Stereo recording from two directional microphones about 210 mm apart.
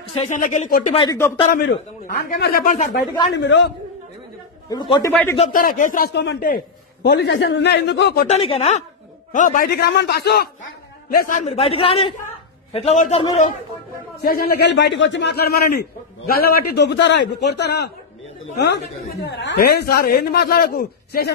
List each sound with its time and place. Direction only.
0.0 s speech: 30° left (ahead or behind)
0.4 s speech: 40° left (ahead or behind)
0.9 s speech: 15° left (ahead or behind)
1.5 s a man's voice: 50° left (ahead or behind)
3.3 s a man's voice: 60° left (ahead or behind)
4.6 s a man's voice: 20° left (ahead or behind)
5.4 s a man's voice: 40° left (ahead or behind)
8.3 s a man's voice: 25° left (ahead or behind); by 10.5 s 50° left (ahead or behind)
11.1 s a man's voice: 40° left (ahead or behind)
14.2 s a man's voice: 45° left (ahead or behind)